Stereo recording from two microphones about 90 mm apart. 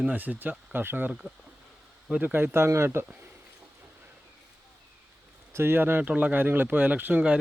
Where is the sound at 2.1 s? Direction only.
10° right (ahead or behind).